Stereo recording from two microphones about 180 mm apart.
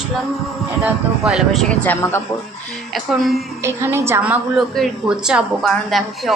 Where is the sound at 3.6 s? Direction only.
15° right (ahead or behind).